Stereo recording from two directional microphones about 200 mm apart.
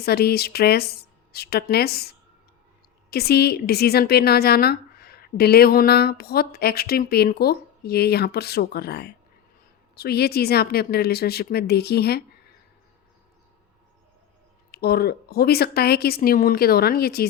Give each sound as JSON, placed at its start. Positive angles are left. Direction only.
{"t": 0.0, "sound": "a woman's voice", "side_deg": 50}
{"t": 14.7, "sound": "a woman's voice", "side_deg": 50}